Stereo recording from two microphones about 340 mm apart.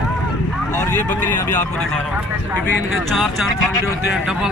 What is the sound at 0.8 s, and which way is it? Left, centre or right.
Speech, centre.